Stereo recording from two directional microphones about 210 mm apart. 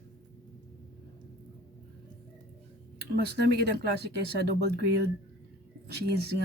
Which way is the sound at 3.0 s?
50° right (ahead or behind).